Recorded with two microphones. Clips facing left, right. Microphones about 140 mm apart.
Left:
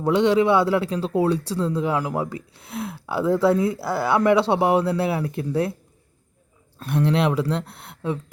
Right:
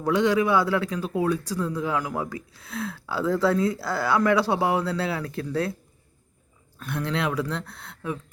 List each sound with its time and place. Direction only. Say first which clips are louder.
0.0 s a man's voice: left 4 dB; 25° left (ahead or behind)
6.7 s a man's voice: left 7 dB; 25° left (ahead or behind)